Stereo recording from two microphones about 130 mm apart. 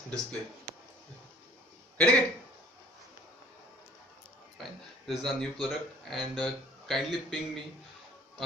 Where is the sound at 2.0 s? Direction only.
10° left (ahead or behind).